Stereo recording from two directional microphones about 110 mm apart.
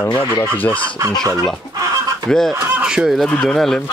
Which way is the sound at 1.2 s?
30° right (ahead or behind).